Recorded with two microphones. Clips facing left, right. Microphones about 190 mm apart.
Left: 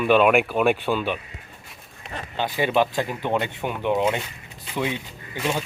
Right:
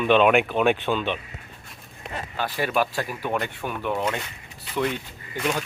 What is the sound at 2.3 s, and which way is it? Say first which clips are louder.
Speech: left 3 dB; 20° left (ahead or behind).